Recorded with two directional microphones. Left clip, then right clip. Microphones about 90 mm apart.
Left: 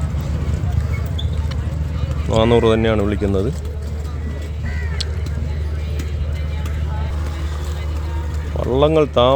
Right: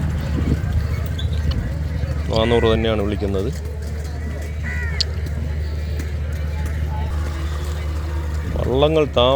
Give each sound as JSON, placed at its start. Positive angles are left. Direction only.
{"t": 2.3, "sound": "speech", "side_deg": 55}
{"t": 5.0, "sound": "a sound", "side_deg": 55}
{"t": 8.6, "sound": "speech", "side_deg": 40}